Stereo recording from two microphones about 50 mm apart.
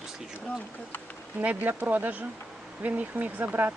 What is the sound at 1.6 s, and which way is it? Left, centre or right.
Speech, right.